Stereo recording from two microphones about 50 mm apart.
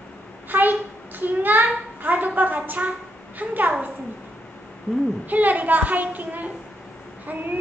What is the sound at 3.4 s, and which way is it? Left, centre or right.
Speech, right.